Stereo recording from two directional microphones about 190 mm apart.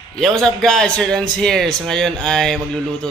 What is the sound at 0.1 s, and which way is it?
A man's voice, 5° left (ahead or behind).